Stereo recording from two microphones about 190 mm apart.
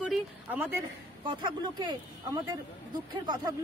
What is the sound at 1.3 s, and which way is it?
Speech, 25° right (ahead or behind).